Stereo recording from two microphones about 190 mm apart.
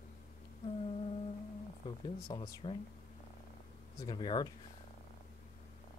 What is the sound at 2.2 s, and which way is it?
Speech, 20° left (ahead or behind).